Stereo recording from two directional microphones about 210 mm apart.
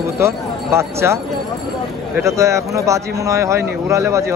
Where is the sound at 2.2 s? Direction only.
15° right (ahead or behind).